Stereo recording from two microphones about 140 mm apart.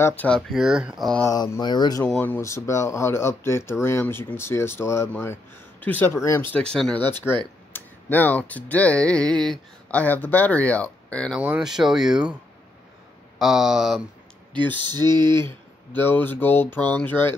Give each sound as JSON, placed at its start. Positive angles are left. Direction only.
{"t": 0.0, "sound": "speech", "side_deg": 10}
{"t": 0.5, "sound": "speech", "side_deg": -5}
{"t": 1.2, "sound": "speech", "side_deg": 30}
{"t": 2.0, "sound": "speech", "side_deg": 10}
{"t": 11.3, "sound": "speech", "side_deg": -5}
{"t": 13.4, "sound": "speech", "side_deg": 0}
{"t": 14.8, "sound": "a sound", "side_deg": -30}
{"t": 15.4, "sound": "speech", "side_deg": 15}